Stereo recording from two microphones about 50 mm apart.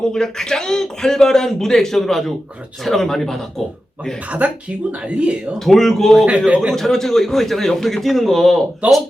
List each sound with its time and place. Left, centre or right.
0.0 s a man's voice: centre
4.3 s speech: right
5.5 s a man's voice: centre
6.2 s speech: right
6.7 s a man's voice: centre
8.8 s speech: right